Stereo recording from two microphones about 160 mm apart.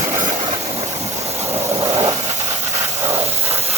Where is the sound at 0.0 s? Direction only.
50° right (ahead or behind).